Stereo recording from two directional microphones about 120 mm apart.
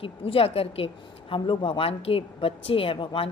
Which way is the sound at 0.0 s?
50° left (ahead or behind).